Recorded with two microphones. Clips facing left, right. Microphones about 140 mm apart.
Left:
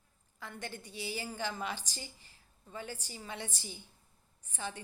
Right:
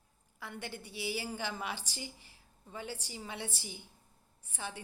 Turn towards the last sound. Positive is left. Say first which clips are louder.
# left 2 dB
turn(degrees=-10)  # may be behind; listen again after turning